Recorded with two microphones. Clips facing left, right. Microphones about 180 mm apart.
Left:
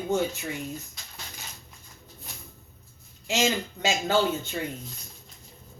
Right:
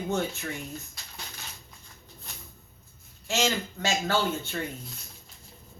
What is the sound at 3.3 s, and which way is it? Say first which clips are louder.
Speech: left 2 dB; 15° left (ahead or behind).